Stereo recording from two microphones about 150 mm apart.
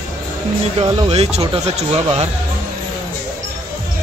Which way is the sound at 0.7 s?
45° right (ahead or behind).